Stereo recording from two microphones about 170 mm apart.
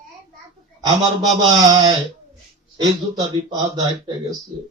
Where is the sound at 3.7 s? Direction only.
25° right (ahead or behind).